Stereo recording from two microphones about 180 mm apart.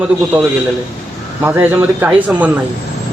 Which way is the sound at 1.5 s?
10° right (ahead or behind).